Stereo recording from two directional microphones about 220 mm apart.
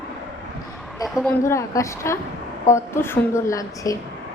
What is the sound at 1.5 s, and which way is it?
A woman's voice, 15° left (ahead or behind).